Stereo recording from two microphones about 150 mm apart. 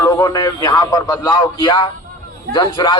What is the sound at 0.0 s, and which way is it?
A man's voice, 25° left (ahead or behind).